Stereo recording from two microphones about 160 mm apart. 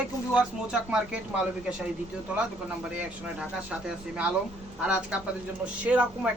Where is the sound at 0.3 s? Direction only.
5° right (ahead or behind).